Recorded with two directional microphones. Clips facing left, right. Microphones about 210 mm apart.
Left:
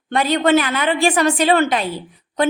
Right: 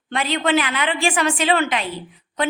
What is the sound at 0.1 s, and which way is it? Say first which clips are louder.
A woman's voice: left 5 dB; 40° left (ahead or behind).